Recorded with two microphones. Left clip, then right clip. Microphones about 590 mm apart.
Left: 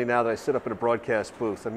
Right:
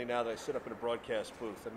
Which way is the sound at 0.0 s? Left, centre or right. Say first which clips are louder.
Left 11 dB; left.